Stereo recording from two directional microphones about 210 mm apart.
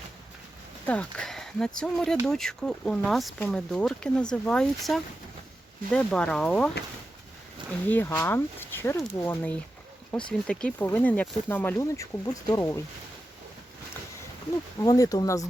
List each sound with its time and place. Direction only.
0.9 s speech: 5° left (ahead or behind)
7.9 s speech: 10° left (ahead or behind)
14.8 s speech: 15° left (ahead or behind)